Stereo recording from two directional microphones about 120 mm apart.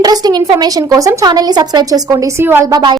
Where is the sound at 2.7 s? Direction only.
40° right (ahead or behind).